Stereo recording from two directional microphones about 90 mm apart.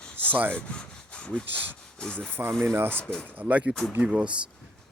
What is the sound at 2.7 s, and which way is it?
Speech, 25° right (ahead or behind).